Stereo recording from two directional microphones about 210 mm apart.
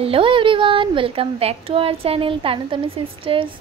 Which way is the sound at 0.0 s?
25° right (ahead or behind).